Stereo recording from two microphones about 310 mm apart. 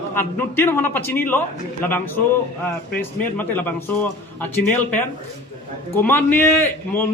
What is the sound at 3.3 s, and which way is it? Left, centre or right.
Speech, centre.